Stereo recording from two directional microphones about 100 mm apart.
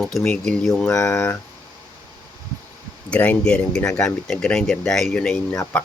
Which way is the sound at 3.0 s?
15° left (ahead or behind).